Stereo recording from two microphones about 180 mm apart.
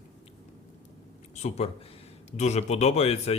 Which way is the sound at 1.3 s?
40° left (ahead or behind).